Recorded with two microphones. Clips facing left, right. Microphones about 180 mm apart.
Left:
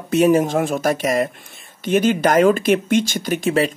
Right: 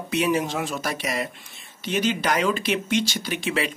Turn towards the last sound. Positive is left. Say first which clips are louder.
# left 8 dB
turn(degrees=45)  # may be behind; listen again after turning